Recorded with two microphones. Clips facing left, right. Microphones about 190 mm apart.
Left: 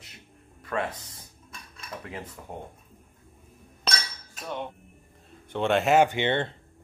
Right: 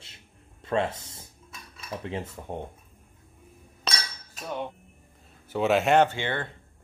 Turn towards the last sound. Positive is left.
turn(degrees=25)  # may be behind; listen again after turning